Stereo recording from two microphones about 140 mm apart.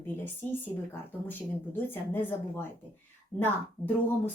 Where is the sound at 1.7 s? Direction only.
15° left (ahead or behind).